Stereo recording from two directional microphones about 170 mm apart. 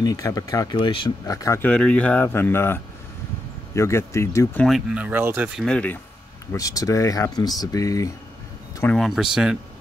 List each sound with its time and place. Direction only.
0.0 s speech: 20° left (ahead or behind)
4.6 s speech: centre (ahead or behind)
5.6 s speech: 5° left (ahead or behind)
6.5 s speech: 20° left (ahead or behind)
8.9 s speech: centre (ahead or behind)